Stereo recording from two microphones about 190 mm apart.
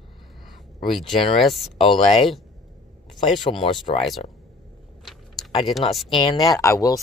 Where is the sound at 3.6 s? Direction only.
25° left (ahead or behind).